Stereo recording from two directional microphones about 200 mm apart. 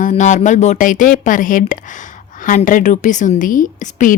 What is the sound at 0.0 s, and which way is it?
A woman's voice, 40° left (ahead or behind).